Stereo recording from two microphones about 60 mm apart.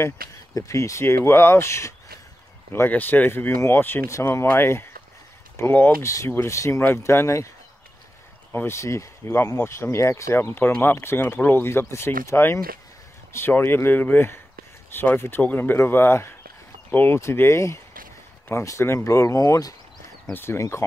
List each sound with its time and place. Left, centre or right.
0.6 s speech: left
2.9 s speech: left
6.0 s speech: left
8.5 s speech: left
8.7 s speech: left
19.4 s speech: left
20.3 s speech: left